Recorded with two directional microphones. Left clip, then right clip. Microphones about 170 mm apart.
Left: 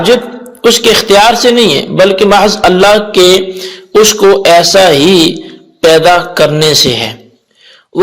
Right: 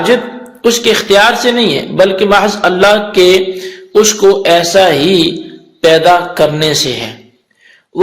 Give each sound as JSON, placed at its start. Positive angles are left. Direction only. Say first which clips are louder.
{"t": 0.6, "sound": "a man's voice", "louder": "left 4 dB", "side_deg": 35}